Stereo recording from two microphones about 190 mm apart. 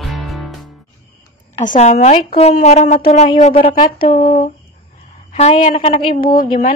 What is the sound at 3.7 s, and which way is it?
Speech, 45° left (ahead or behind).